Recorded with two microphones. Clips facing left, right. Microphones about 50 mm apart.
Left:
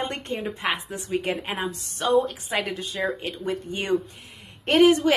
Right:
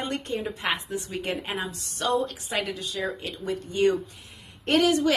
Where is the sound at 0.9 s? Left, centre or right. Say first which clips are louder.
Left 4 dB; centre.